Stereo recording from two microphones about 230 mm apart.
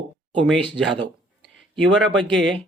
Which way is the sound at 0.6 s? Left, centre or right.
Right.